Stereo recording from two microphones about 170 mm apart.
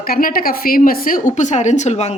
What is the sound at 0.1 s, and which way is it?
A woman's voice, 60° left (ahead or behind).